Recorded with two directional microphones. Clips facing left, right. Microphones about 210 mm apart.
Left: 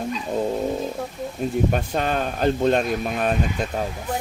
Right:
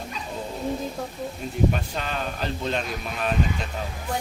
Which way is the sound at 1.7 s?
50° left (ahead or behind).